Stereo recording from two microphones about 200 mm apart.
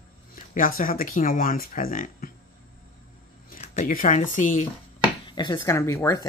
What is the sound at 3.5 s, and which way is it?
Speech, 35° left (ahead or behind).